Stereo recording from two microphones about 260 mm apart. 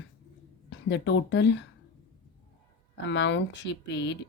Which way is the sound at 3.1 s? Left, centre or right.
Left.